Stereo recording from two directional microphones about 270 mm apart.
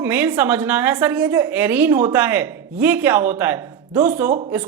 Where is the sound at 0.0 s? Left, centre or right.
Centre.